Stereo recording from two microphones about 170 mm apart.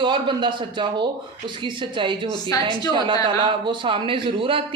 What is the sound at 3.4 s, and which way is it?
A woman's voice, 30° right (ahead or behind).